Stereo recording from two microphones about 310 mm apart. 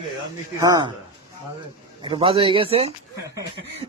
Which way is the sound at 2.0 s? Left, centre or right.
Centre.